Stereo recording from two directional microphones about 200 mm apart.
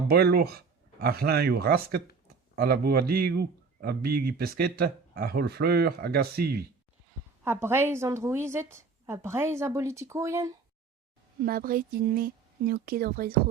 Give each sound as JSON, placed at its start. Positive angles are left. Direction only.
{"t": 0.1, "sound": "a man's voice", "side_deg": -55}
{"t": 7.4, "sound": "a woman's voice", "side_deg": -10}
{"t": 11.4, "sound": "a man's voice", "side_deg": -45}